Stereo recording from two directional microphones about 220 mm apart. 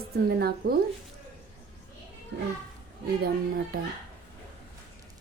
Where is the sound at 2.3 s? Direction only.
50° right (ahead or behind).